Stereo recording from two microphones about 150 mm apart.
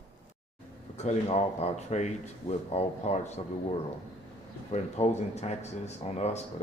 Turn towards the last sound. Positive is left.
turn(degrees=45)  # may be behind; listen again after turning